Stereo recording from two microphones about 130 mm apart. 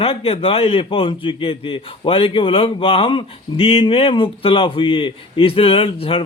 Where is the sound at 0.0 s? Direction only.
50° left (ahead or behind).